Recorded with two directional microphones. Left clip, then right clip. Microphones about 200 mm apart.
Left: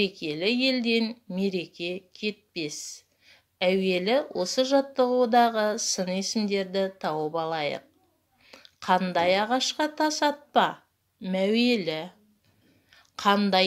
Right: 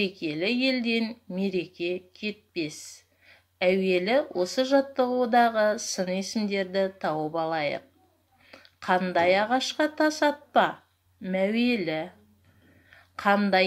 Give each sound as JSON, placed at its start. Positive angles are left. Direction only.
{"t": 0.0, "sound": "a woman's voice", "side_deg": 35}